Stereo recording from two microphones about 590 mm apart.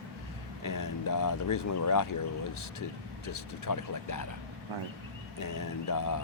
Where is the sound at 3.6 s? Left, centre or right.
Left.